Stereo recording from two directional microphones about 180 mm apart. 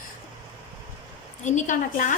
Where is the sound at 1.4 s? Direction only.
45° left (ahead or behind).